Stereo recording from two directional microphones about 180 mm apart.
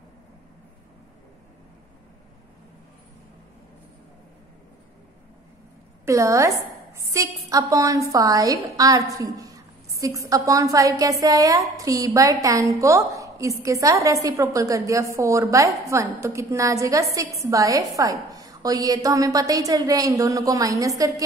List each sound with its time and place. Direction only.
6.0 s a woman's voice: 15° right (ahead or behind)